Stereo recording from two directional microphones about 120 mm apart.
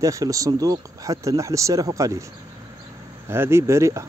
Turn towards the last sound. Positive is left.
turn(degrees=-25)  # may be behind; listen again after turning